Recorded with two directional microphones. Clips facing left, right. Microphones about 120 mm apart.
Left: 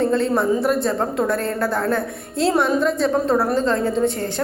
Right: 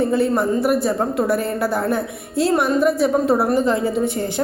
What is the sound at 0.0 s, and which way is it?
A woman's voice, 5° right (ahead or behind).